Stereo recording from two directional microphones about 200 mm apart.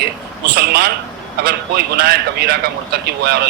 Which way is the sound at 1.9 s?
50° right (ahead or behind).